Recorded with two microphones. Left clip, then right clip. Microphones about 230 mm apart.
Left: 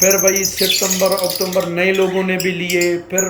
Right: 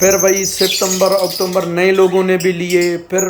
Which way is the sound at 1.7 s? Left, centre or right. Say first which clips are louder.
Right 7 dB; centre.